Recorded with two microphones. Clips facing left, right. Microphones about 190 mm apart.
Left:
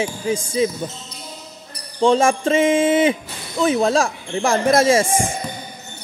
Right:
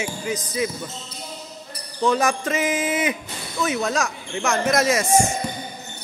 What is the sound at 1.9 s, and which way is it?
Speech, 30° left (ahead or behind).